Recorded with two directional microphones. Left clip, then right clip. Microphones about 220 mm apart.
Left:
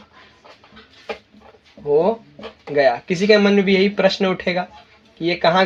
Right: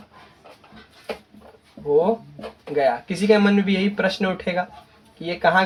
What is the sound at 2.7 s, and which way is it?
Speech, 35° left (ahead or behind).